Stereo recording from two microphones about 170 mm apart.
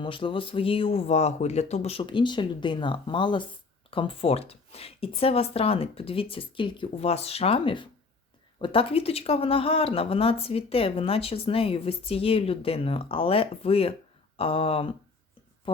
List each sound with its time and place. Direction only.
0.0 s speech: 30° left (ahead or behind)